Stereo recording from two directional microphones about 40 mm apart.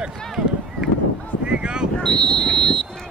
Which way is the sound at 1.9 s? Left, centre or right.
Left.